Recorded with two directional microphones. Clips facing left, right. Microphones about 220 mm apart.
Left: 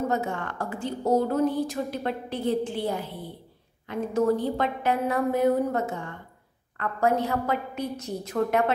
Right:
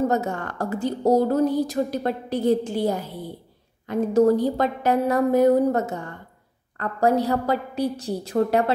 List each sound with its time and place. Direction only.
0.1 s a woman's voice: 40° right (ahead or behind)